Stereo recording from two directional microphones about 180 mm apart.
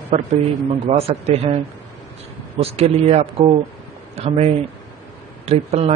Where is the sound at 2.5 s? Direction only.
35° right (ahead or behind).